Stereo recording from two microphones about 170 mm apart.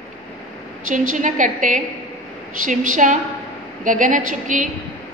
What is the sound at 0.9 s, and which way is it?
A woman's voice, 50° right (ahead or behind).